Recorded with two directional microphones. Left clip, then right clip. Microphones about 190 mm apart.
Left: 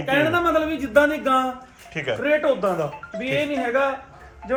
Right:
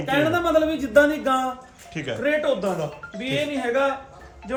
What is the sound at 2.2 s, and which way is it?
Speech, 15° left (ahead or behind).